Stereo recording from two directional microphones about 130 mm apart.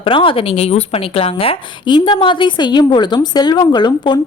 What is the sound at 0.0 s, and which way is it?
A woman's voice, 40° left (ahead or behind).